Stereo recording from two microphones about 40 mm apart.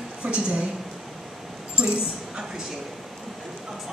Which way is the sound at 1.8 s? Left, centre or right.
Right.